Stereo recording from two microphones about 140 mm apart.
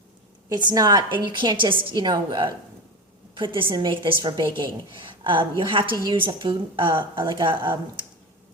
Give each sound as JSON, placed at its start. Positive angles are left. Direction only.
{"t": 0.4, "sound": "a woman's voice", "side_deg": -30}